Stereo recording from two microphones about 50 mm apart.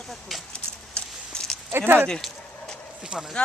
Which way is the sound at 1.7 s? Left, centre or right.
Right.